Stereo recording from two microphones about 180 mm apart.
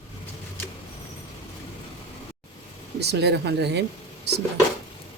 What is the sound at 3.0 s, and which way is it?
Speech, 70° right (ahead or behind).